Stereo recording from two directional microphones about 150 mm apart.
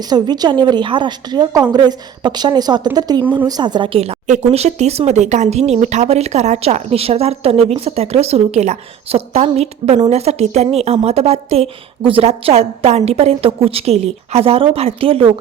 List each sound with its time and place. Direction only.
0.1 s a woman's voice: 30° right (ahead or behind)